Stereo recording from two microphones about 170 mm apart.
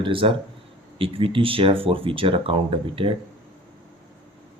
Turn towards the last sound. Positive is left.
turn(degrees=-30)  # may be behind; listen again after turning